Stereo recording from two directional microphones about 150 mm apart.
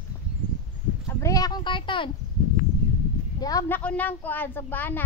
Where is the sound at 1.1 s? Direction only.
20° left (ahead or behind).